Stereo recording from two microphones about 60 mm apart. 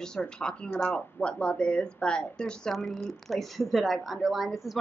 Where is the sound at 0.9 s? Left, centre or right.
Centre.